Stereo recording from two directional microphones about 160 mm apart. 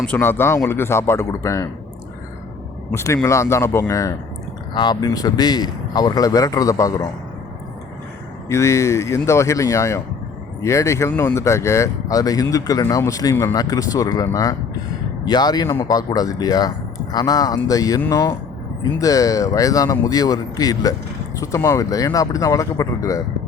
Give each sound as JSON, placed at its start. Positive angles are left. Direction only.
{"t": 0.0, "sound": "speech", "side_deg": 10}
{"t": 2.9, "sound": "speech", "side_deg": 15}
{"t": 8.4, "sound": "speech", "side_deg": 20}